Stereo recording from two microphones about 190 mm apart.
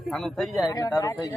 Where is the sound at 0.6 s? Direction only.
20° left (ahead or behind).